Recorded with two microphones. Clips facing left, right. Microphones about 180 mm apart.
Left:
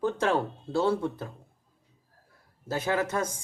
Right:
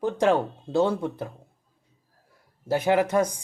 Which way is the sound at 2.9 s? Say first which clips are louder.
Right 7 dB; 15° right (ahead or behind).